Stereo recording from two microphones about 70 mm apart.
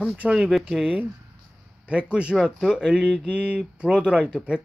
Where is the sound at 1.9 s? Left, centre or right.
Centre.